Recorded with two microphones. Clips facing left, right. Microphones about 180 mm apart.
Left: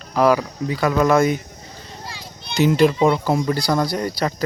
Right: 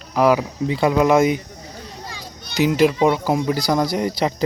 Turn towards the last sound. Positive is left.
turn(degrees=-20)  # may be behind; listen again after turning